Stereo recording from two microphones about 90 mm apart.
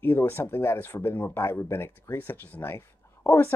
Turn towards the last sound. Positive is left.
turn(degrees=25)  # may be behind; listen again after turning